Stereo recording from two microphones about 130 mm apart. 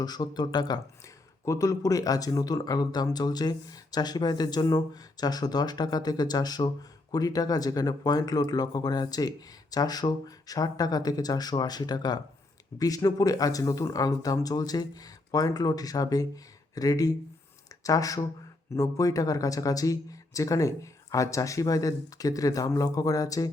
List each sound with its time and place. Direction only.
0.0 s speech: 30° left (ahead or behind)